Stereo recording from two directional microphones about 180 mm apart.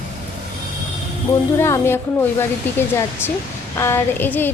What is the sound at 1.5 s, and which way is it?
A woman's voice, 15° left (ahead or behind).